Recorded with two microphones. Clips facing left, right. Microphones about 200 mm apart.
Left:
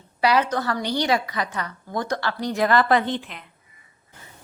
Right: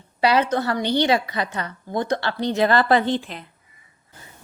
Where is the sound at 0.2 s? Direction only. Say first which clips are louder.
Right 2 dB; 25° right (ahead or behind).